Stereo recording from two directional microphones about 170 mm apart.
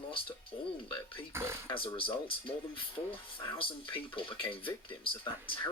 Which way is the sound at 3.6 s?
30° left (ahead or behind).